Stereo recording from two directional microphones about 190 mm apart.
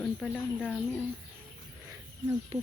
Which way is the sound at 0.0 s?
5° left (ahead or behind).